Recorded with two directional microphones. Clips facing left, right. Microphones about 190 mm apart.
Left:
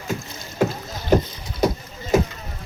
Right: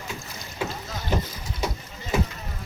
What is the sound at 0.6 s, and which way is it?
Rowboat, 45° left (ahead or behind).